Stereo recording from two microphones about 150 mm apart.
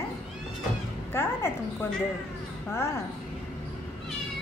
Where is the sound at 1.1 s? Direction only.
15° left (ahead or behind).